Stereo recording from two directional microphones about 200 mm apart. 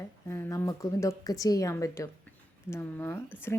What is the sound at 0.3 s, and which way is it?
A woman's voice, 10° left (ahead or behind).